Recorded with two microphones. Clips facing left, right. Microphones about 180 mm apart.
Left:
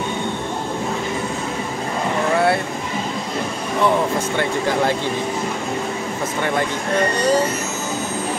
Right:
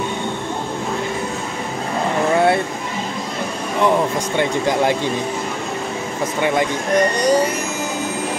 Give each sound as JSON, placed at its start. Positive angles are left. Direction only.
{"t": 4.4, "sound": "speech", "side_deg": -15}
{"t": 7.0, "sound": "speech", "side_deg": -15}